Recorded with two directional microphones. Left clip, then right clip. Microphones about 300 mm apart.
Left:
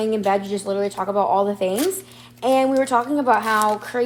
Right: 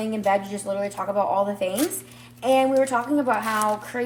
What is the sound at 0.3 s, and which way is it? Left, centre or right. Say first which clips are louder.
Speech: left 2 dB; left.